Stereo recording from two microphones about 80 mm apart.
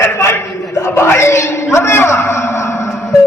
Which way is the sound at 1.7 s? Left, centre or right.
Left.